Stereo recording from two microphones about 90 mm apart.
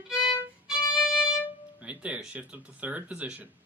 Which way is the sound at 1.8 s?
15° right (ahead or behind).